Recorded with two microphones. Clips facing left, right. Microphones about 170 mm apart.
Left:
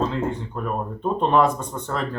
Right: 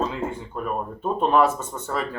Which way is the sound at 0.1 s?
5° right (ahead or behind).